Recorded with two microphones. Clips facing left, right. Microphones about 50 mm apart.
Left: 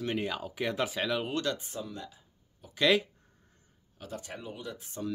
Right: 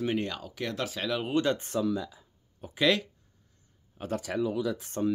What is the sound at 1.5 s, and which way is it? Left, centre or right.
Speech, right.